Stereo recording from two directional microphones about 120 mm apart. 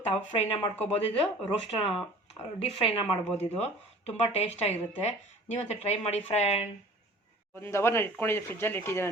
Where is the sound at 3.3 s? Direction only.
65° left (ahead or behind).